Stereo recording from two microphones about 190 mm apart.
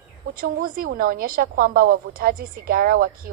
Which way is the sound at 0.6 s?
50° right (ahead or behind).